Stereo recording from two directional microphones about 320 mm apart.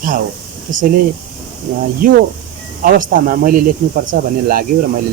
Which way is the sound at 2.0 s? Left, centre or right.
Right.